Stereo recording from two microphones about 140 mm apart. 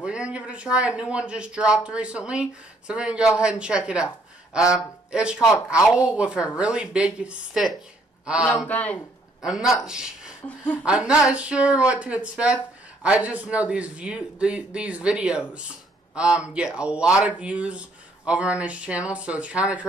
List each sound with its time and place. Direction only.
0.0 s a man's voice: 5° right (ahead or behind)
8.6 s speech: 10° left (ahead or behind)
9.4 s speech: 5° right (ahead or behind)
10.4 s speech: 10° left (ahead or behind)
10.9 s speech: 5° right (ahead or behind)